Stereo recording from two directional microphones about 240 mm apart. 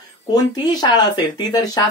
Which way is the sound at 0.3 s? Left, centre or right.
Centre.